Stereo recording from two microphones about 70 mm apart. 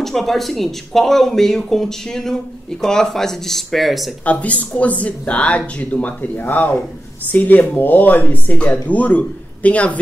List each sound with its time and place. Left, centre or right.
0.0 s speech: centre
4.2 s speech: centre